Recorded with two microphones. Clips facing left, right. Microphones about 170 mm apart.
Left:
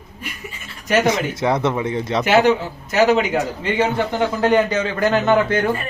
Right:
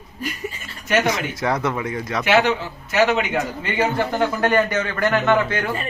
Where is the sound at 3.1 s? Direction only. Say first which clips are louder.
Left 5 dB; 35° left (ahead or behind).